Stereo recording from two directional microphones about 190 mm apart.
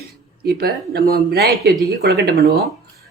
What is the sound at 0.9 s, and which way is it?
A man's voice, 55° right (ahead or behind).